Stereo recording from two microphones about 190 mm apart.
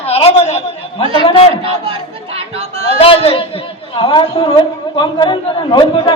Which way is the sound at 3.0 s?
30° left (ahead or behind).